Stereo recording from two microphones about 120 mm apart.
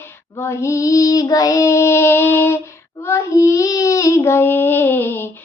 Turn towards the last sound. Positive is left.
turn(degrees=20)  # may be behind; listen again after turning